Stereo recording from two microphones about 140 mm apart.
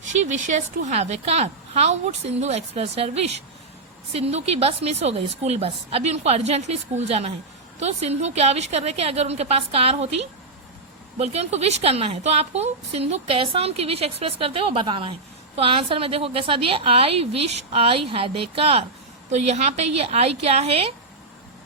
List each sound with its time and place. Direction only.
0.0 s a woman's voice: 60° right (ahead or behind)